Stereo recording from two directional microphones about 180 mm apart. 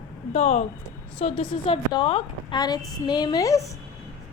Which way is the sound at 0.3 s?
35° left (ahead or behind).